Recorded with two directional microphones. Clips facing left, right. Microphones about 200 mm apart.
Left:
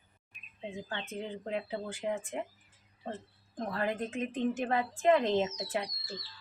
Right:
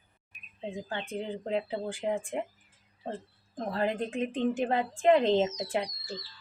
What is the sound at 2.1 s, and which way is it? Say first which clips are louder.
Speech: right 4 dB; 15° right (ahead or behind).